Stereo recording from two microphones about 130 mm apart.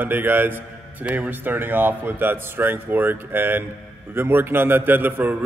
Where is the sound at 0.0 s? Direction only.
15° right (ahead or behind).